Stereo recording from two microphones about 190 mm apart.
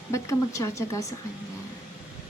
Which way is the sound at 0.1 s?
15° left (ahead or behind).